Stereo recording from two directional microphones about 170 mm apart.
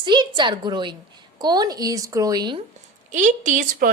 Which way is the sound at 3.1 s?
50° right (ahead or behind).